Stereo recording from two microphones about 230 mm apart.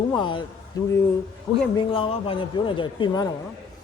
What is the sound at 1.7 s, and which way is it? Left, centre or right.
Speech, left.